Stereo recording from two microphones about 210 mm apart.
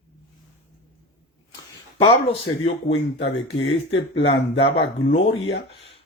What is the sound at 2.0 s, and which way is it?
Speech, 25° left (ahead or behind).